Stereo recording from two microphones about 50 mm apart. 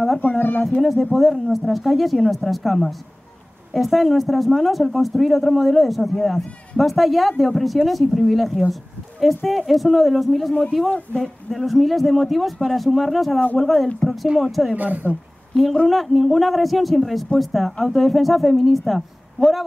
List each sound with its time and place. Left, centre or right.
0.4 s a sound: left
0.7 s speech: centre
15.0 s a woman's voice: right
15.5 s speech: centre